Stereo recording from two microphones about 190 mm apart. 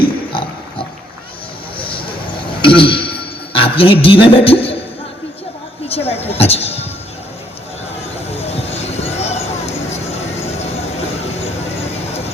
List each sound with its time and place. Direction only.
1.8 s a sound: 25° left (ahead or behind)
4.0 s beatboxing: 30° left (ahead or behind)
5.9 s speech: 30° left (ahead or behind)
8.3 s vehicle: 35° left (ahead or behind)